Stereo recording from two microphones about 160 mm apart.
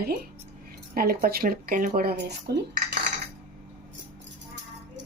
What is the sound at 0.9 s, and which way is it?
Speech, 70° right (ahead or behind).